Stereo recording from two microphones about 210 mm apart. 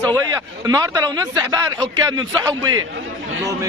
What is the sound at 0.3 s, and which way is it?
Speech, 15° right (ahead or behind).